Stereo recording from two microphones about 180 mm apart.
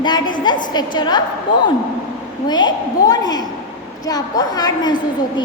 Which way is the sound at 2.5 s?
20° left (ahead or behind).